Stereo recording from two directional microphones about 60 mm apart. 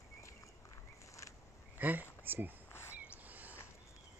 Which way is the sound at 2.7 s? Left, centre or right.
Left.